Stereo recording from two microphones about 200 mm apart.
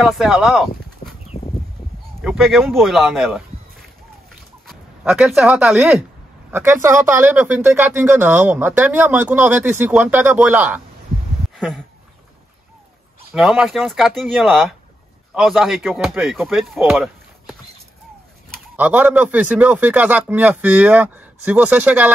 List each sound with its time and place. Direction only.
0.0 s speech: centre (ahead or behind)
2.2 s speech: centre (ahead or behind)
4.6 s speech: 5° right (ahead or behind)
11.5 s a sound: centre (ahead or behind)
13.3 s speech: 5° right (ahead or behind)